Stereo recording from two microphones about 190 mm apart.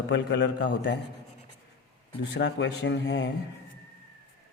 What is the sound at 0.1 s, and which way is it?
Speech, 70° left (ahead or behind).